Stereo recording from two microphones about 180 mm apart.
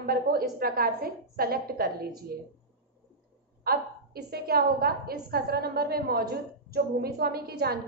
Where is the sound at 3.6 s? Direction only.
55° right (ahead or behind).